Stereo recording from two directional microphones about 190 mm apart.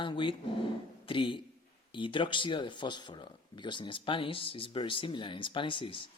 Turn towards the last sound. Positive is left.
turn(degrees=25)  # may be behind; listen again after turning